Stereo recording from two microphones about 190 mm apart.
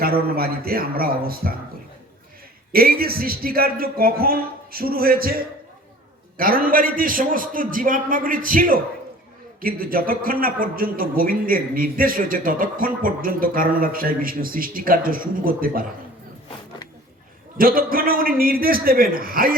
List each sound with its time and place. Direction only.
0.0 s a man's voice: 50° right (ahead or behind)
2.7 s a man's voice: 50° right (ahead or behind)
17.6 s a man's voice: 50° right (ahead or behind)